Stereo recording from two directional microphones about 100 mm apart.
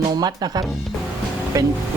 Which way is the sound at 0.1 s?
45° right (ahead or behind).